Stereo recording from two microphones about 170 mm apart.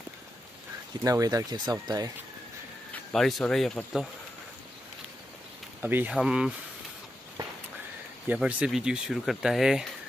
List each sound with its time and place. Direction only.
1.0 s speech: 20° right (ahead or behind)
2.9 s speech: 5° left (ahead or behind)
5.8 s speech: 10° right (ahead or behind)
8.3 s speech: 10° right (ahead or behind)